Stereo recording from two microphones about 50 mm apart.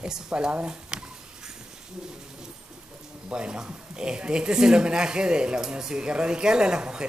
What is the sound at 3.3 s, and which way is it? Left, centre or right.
Speech, centre.